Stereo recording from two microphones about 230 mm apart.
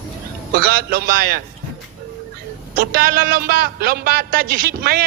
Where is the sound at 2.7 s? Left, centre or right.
Right.